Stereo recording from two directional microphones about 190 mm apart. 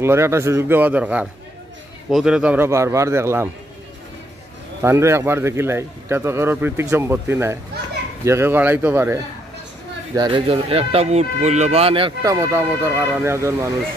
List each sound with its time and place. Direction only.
0.0 s a man's voice: 15° right (ahead or behind)
4.8 s a man's voice: 15° right (ahead or behind)
10.1 s speech: 25° right (ahead or behind)